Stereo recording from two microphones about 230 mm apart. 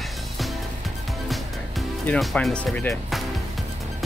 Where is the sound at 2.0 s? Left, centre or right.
Centre.